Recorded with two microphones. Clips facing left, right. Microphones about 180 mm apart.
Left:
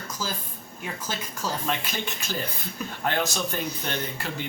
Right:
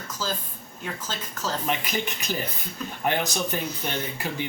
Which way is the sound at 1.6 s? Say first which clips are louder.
Right 2 dB; 15° right (ahead or behind).